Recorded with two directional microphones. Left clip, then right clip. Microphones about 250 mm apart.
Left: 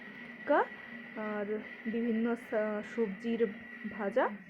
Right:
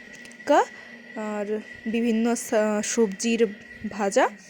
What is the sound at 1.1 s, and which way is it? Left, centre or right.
Speech, right.